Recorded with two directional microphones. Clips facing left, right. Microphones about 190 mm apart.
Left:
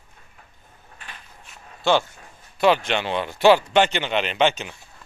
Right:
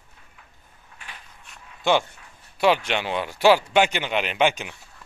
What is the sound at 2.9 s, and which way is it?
Speech, 10° right (ahead or behind).